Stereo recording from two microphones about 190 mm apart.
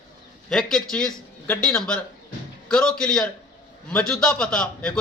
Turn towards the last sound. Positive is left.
turn(degrees=5)  # may be behind; listen again after turning